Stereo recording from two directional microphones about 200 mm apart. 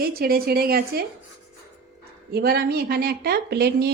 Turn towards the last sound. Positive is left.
turn(degrees=-55)  # may be behind; listen again after turning